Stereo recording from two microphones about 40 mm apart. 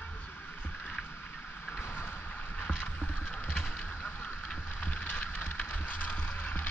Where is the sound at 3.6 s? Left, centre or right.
Left.